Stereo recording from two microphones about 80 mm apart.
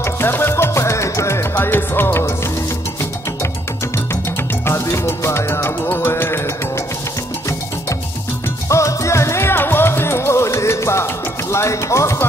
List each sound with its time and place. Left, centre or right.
0.0 s music: left
4.6 s music: left
8.6 s music: left
11.5 s speech: left